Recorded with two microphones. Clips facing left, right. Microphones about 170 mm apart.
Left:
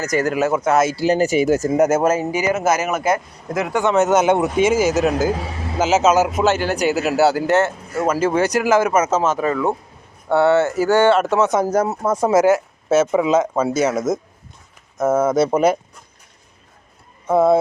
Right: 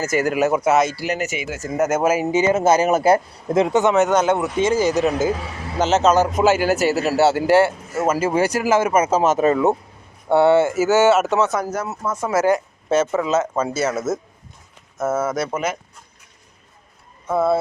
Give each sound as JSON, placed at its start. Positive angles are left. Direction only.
{"t": 0.1, "sound": "speech", "side_deg": -15}
{"t": 0.9, "sound": "speech", "side_deg": 30}
{"t": 1.7, "sound": "speech", "side_deg": 10}
{"t": 2.0, "sound": "speech", "side_deg": -10}
{"t": 2.3, "sound": "speech", "side_deg": -25}
{"t": 3.9, "sound": "a man's voice", "side_deg": 5}
{"t": 6.4, "sound": "speech", "side_deg": -10}
{"t": 11.3, "sound": "speech", "side_deg": 15}
{"t": 11.6, "sound": "speech", "side_deg": 35}
{"t": 12.5, "sound": "speech", "side_deg": 5}
{"t": 15.4, "sound": "speech", "side_deg": 35}
{"t": 17.2, "sound": "speech", "side_deg": 20}